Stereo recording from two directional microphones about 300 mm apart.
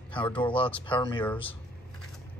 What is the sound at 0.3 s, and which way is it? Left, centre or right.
Speech, centre.